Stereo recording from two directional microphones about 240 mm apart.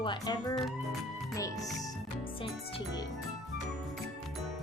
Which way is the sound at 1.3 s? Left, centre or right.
Centre.